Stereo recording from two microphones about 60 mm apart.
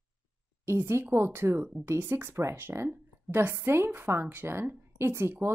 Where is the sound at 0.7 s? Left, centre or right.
Right.